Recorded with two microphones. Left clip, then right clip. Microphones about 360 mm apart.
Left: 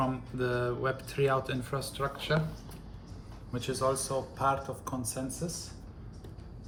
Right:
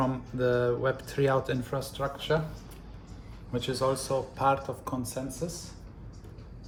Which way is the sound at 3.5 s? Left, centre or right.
Centre.